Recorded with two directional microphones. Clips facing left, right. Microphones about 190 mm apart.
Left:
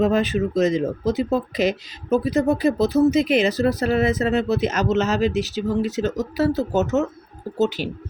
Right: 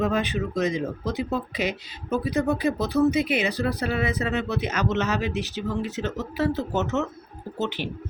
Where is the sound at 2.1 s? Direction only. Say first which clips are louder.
Left 5 dB; 40° left (ahead or behind).